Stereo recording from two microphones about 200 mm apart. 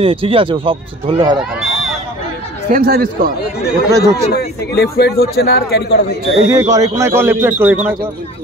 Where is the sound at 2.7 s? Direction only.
50° right (ahead or behind).